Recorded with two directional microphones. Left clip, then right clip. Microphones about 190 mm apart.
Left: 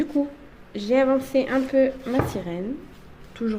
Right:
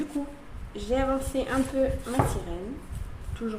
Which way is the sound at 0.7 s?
60° left (ahead or behind).